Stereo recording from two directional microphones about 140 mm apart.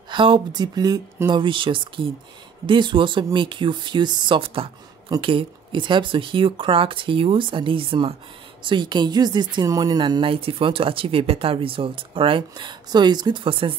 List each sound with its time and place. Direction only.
0.1 s speech: 35° right (ahead or behind)